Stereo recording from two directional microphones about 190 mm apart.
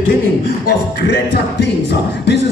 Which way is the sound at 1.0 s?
65° left (ahead or behind).